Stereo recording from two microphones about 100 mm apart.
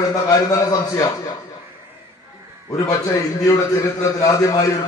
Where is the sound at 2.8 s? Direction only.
35° left (ahead or behind).